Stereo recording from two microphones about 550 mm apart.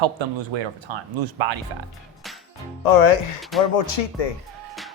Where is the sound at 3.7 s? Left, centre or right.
Left.